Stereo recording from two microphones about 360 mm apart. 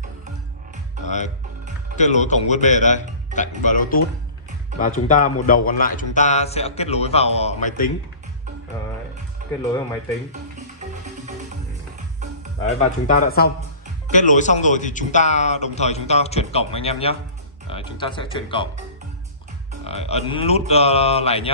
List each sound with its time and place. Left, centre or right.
1.0 s music: centre
2.0 s speech: centre
13.0 s speech: left
19.9 s speech: centre